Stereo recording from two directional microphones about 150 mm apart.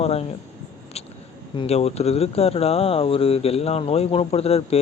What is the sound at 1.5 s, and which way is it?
Speech, 40° left (ahead or behind).